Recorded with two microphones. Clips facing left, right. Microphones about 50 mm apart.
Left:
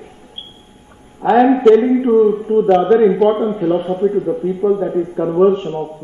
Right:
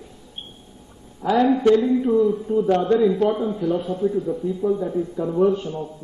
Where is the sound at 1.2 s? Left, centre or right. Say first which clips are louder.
Left 7 dB; left.